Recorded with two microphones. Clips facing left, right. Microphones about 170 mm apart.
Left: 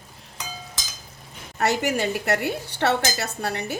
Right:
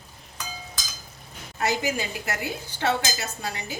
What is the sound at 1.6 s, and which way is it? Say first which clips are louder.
Speech: left 4 dB; 70° left (ahead or behind).